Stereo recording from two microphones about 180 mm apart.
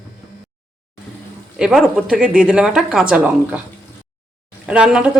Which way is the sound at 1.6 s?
5° right (ahead or behind).